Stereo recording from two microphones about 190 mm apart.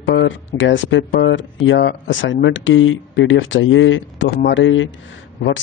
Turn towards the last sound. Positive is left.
turn(degrees=80)